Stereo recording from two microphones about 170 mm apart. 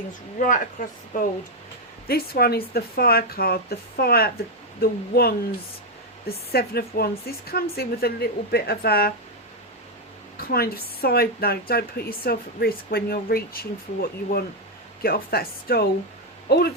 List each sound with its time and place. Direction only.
0.3 s speech: 50° left (ahead or behind)
2.0 s speech: 65° left (ahead or behind)
10.4 s speech: 65° left (ahead or behind)